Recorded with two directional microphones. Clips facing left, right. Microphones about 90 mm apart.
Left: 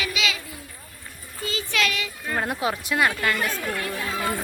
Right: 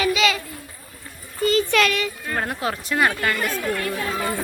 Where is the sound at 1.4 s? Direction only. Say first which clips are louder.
Right 8 dB; 60° right (ahead or behind).